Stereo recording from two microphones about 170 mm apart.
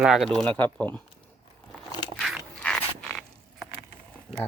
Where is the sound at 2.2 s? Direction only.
Centre (ahead or behind).